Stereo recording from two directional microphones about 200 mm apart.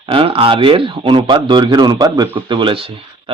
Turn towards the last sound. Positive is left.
turn(degrees=-25)  # may be behind; listen again after turning